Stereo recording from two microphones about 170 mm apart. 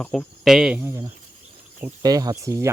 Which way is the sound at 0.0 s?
10° left (ahead or behind).